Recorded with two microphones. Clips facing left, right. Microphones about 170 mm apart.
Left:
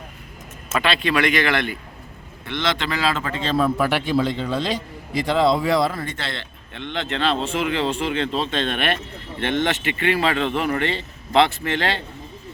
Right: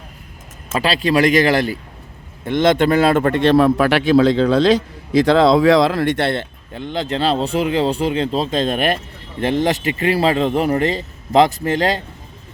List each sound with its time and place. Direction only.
0.7 s a man's voice: 35° right (ahead or behind)
2.4 s a man's voice: 50° right (ahead or behind)
6.7 s a man's voice: 40° right (ahead or behind)